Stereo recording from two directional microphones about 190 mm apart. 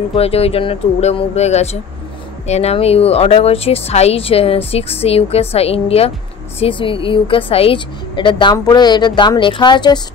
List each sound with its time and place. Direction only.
0.1 s a woman's voice: 30° left (ahead or behind)